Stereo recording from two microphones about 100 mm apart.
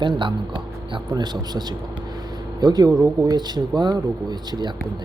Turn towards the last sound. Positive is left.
turn(degrees=-45)  # may be behind; listen again after turning